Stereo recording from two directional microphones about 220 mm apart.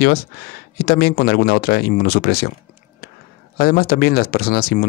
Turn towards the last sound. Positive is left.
turn(degrees=45)  # may be behind; listen again after turning